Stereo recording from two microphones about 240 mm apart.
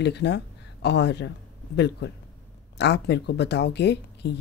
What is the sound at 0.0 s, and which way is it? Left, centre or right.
Speech, left.